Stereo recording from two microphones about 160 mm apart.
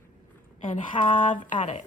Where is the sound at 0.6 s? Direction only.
35° left (ahead or behind).